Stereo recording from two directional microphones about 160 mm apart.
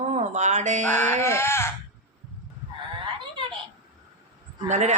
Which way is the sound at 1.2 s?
15° left (ahead or behind).